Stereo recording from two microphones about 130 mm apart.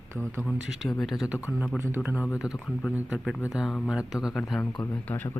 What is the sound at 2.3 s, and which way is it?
Speech, 25° left (ahead or behind).